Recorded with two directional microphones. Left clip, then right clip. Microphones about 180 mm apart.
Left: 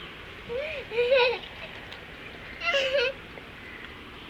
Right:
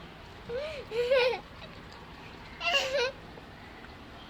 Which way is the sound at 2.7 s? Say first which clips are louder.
Left 3 dB; 25° right (ahead or behind).